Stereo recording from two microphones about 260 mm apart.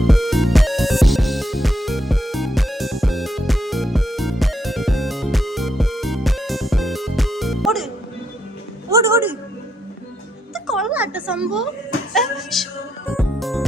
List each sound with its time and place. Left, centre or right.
0.0 s music: centre
8.9 s a sound: centre
10.5 s music: centre